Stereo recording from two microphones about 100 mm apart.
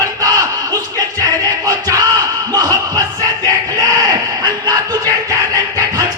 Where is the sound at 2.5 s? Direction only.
40° right (ahead or behind).